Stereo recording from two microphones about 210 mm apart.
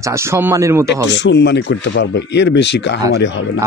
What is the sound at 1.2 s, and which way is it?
Speech, 60° left (ahead or behind).